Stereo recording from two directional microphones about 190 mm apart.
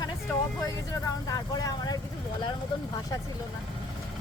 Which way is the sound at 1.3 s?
20° left (ahead or behind).